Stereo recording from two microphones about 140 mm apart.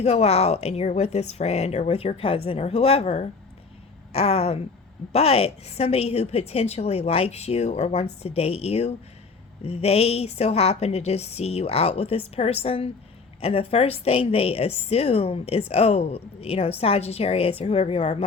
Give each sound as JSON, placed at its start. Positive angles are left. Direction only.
{"t": 0.0, "sound": "a woman's voice", "side_deg": 45}